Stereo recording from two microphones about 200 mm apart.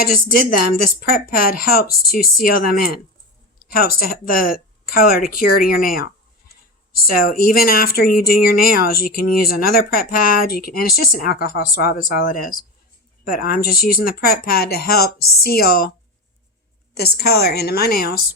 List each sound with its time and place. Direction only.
0.0 s speech: 45° left (ahead or behind)
16.9 s speech: 50° left (ahead or behind)